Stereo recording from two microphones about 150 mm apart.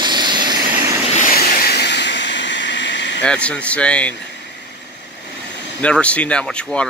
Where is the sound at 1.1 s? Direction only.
65° left (ahead or behind); by 1.8 s 80° left.